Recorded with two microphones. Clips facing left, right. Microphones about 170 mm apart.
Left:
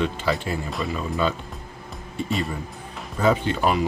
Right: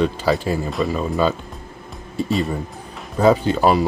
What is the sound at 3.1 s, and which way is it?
Speech, 35° right (ahead or behind).